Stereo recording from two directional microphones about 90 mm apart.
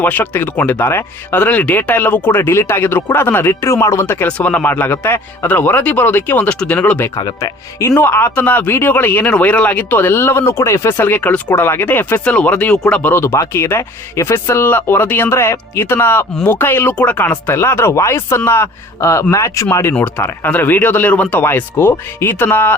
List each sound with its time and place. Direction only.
0.0 s speech: 20° left (ahead or behind)
4.3 s speech: 15° left (ahead or behind)
7.2 s speech: 50° left (ahead or behind)
7.8 s speech: 25° left (ahead or behind)
19.9 s speech: 15° left (ahead or behind)